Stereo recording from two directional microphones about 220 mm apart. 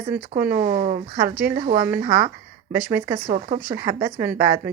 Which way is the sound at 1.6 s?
30° right (ahead or behind).